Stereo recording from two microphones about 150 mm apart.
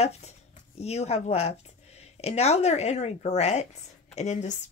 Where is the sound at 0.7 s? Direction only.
45° left (ahead or behind).